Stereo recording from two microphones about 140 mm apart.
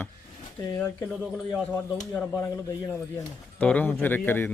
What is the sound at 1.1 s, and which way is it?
Speech, 5° right (ahead or behind).